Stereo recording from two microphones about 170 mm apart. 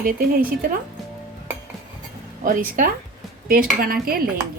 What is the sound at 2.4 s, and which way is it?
A woman's voice, 55° right (ahead or behind).